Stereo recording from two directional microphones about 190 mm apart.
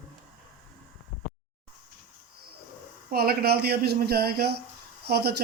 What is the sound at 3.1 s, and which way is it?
Speech, 55° right (ahead or behind).